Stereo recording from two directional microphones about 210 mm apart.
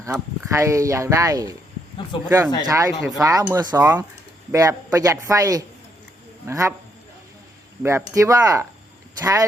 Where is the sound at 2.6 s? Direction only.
15° right (ahead or behind).